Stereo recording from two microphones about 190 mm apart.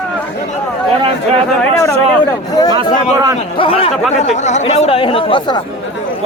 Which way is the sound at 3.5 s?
30° left (ahead or behind).